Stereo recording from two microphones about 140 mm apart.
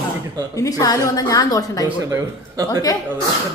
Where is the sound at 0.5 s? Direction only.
25° left (ahead or behind).